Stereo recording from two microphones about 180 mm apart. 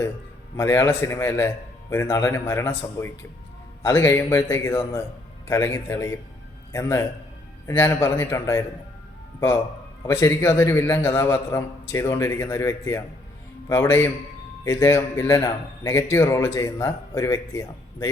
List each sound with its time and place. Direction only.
0.5 s a man's voice: 15° left (ahead or behind)
10.1 s a man's voice: 15° left (ahead or behind)